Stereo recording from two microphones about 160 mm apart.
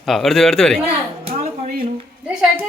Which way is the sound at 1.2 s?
45° right (ahead or behind).